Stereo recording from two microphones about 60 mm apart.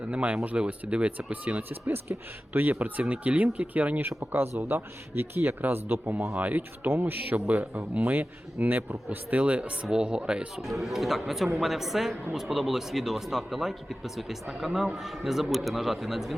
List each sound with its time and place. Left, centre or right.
0.1 s speech: right
4.2 s speech: right
6.6 s speech: right; by 10.5 s centre
10.6 s speech: centre